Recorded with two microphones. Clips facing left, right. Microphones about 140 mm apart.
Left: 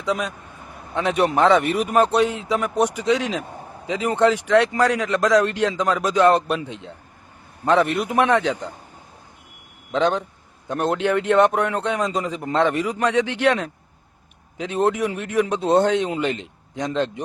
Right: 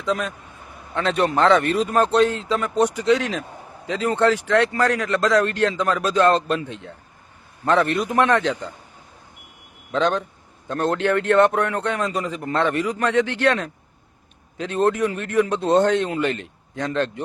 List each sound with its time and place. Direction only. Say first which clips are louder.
0.0 s speech: even; 15° left (ahead or behind)
9.9 s speech: left 1 dB; 15° left (ahead or behind)